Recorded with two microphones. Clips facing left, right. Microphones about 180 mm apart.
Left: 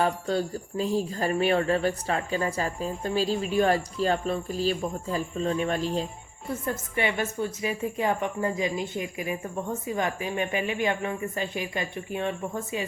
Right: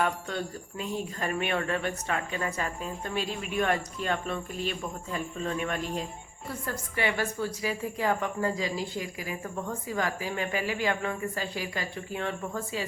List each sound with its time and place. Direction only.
0.0 s a woman's voice: 35° left (ahead or behind)